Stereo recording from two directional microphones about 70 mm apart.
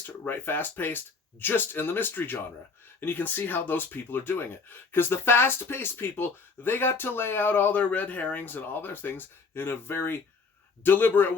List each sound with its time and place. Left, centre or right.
0.3 s speech: left